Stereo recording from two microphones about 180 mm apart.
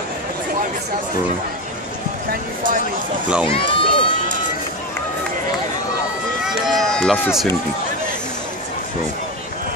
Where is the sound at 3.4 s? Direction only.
30° left (ahead or behind).